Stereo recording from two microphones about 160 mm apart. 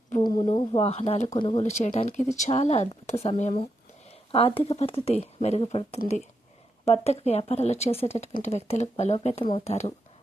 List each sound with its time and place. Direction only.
0.2 s a sound: 30° left (ahead or behind)
1.3 s speech: 30° left (ahead or behind)
1.5 s speech: 45° left (ahead or behind)
4.3 s speech: 35° left (ahead or behind)